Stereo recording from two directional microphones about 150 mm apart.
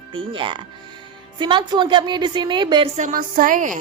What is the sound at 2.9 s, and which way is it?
Speech, 60° right (ahead or behind).